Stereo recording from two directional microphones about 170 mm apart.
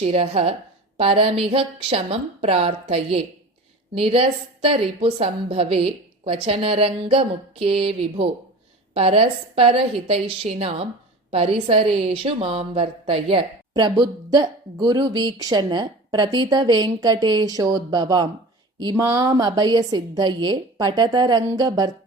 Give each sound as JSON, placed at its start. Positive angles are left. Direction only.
{"t": 0.0, "sound": "a woman's voice", "side_deg": -35}